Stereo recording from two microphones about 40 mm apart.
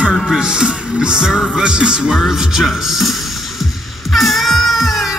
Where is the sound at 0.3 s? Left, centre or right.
Centre.